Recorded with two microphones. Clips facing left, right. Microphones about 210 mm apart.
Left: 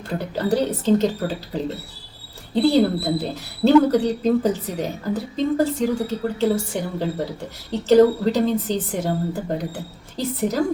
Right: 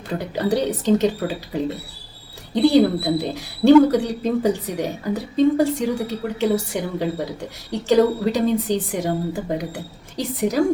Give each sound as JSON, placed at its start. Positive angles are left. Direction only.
{"t": 0.1, "sound": "speech", "side_deg": -15}